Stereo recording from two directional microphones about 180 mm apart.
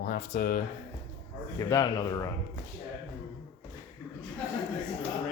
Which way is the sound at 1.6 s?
20° left (ahead or behind).